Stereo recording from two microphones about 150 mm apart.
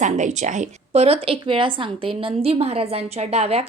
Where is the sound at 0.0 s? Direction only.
55° right (ahead or behind).